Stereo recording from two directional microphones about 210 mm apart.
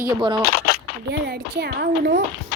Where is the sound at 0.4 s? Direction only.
45° left (ahead or behind).